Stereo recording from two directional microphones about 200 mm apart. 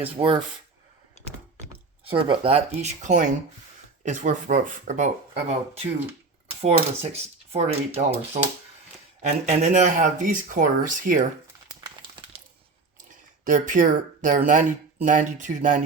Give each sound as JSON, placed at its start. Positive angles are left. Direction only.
{"t": 0.0, "sound": "speech", "side_deg": -25}
{"t": 1.7, "sound": "speech", "side_deg": -25}
{"t": 6.6, "sound": "speech", "side_deg": -35}
{"t": 11.8, "sound": "a sound", "side_deg": -20}
{"t": 13.4, "sound": "speech", "side_deg": -40}